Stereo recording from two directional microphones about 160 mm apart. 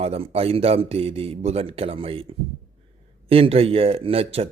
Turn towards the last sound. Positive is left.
turn(degrees=-40)  # may be behind; listen again after turning